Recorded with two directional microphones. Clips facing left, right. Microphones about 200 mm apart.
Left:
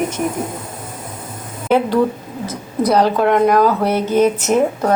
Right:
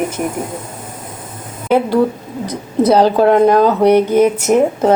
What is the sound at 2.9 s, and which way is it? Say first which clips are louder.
Speech: right 4 dB; 30° right (ahead or behind).